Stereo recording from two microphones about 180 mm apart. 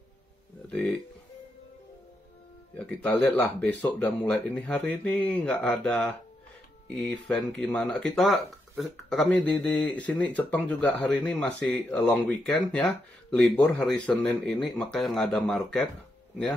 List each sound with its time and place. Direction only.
0.7 s speech: 5° left (ahead or behind)
2.8 s speech: 5° left (ahead or behind)